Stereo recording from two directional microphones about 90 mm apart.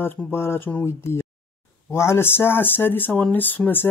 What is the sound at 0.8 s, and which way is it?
Speech, 30° left (ahead or behind).